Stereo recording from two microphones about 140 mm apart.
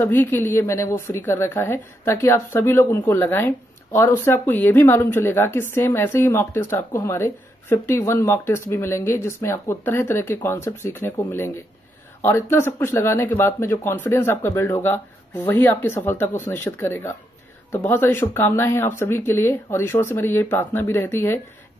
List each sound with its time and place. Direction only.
0.0 s a woman's voice: 15° left (ahead or behind)